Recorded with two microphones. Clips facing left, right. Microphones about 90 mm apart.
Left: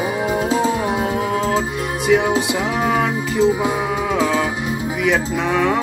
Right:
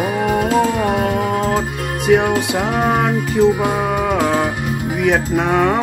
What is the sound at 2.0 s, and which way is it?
Music, 50° right (ahead or behind).